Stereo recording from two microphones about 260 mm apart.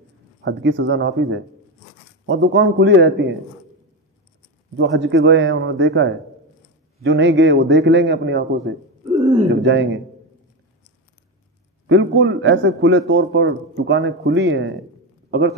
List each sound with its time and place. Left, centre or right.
0.4 s speech: right
4.7 s a man's voice: right
11.9 s speech: right